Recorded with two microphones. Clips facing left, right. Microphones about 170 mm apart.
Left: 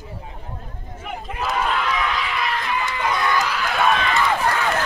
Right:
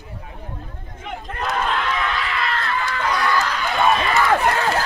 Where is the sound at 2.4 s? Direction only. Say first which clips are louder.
Even; 15° left (ahead or behind).